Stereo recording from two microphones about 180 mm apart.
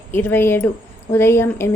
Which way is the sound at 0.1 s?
10° left (ahead or behind).